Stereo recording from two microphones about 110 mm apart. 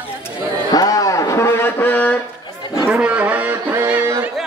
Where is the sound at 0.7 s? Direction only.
35° left (ahead or behind); by 2.1 s 15° left (ahead or behind).